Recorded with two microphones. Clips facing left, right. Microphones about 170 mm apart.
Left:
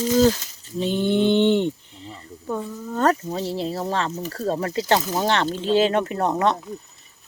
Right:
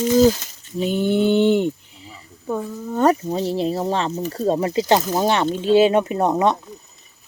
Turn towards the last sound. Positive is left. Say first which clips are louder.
# right 3 dB
turn(degrees=-20)  # may be behind; listen again after turning